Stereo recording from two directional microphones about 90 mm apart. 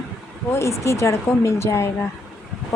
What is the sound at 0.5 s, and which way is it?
Speech, 30° left (ahead or behind).